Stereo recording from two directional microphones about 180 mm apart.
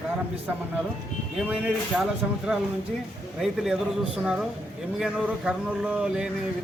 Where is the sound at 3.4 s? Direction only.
Centre (ahead or behind).